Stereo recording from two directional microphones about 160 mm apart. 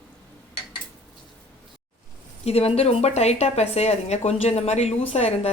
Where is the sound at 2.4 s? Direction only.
40° left (ahead or behind).